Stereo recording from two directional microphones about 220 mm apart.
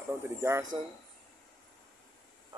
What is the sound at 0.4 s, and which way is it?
Speech, 15° right (ahead or behind).